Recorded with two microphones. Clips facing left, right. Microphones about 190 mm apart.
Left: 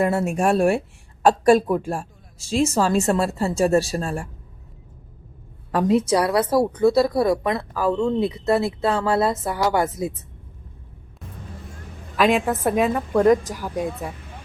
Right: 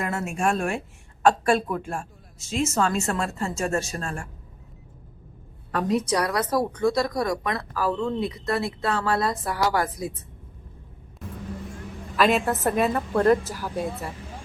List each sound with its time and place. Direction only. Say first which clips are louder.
0.0 s speech: left 6 dB; 35° left (ahead or behind)
5.7 s speech: left 5 dB; 25° left (ahead or behind)
12.1 s a woman's voice: left 2 dB; 10° left (ahead or behind)